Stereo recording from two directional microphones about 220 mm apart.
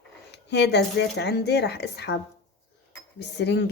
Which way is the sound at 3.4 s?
50° left (ahead or behind).